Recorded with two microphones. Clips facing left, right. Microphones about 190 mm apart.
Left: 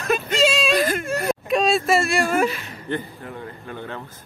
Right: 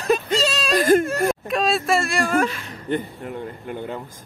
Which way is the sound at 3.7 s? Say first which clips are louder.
Right 3 dB; 15° right (ahead or behind).